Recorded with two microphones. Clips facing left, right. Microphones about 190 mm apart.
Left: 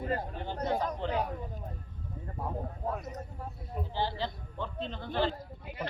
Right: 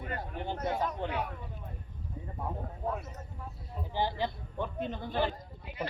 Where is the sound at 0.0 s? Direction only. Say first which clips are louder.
Left 6 dB; 30° left (ahead or behind).